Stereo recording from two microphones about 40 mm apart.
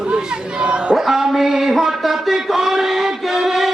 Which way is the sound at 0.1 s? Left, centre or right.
Right.